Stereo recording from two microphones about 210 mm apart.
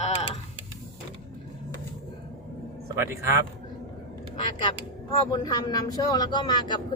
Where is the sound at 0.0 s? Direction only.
30° left (ahead or behind).